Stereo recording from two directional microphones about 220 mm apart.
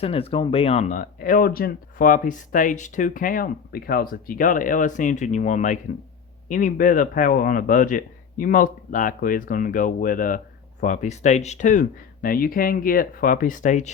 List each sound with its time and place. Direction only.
0.0 s a man's voice: 25° left (ahead or behind)